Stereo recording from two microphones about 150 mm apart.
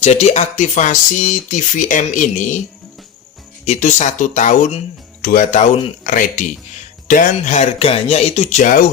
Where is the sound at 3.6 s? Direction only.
50° left (ahead or behind).